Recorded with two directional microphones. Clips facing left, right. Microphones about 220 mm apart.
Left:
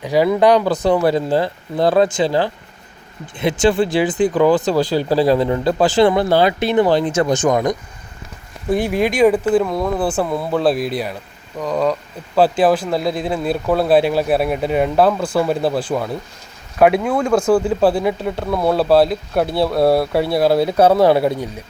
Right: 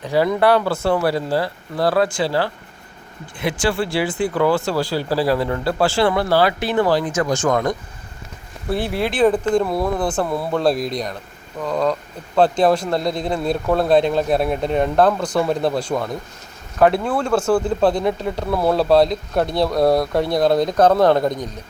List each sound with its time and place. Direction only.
0.0 s speech: 10° left (ahead or behind)
3.6 s speech: 20° left (ahead or behind)
9.6 s speech: 5° right (ahead or behind)
9.9 s speech: 10° left (ahead or behind)